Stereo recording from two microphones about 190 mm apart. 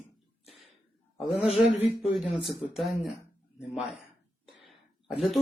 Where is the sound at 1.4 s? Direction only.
30° left (ahead or behind).